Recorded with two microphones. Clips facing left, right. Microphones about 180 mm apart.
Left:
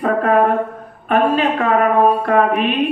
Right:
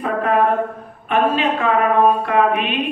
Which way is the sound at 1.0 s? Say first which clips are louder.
Left 2 dB; 40° left (ahead or behind).